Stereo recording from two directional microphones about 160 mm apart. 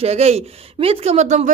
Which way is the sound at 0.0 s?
40° right (ahead or behind).